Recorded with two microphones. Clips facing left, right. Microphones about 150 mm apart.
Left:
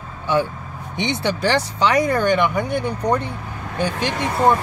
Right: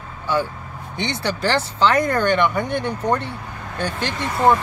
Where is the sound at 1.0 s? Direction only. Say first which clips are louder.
Left 2 dB; 20° left (ahead or behind).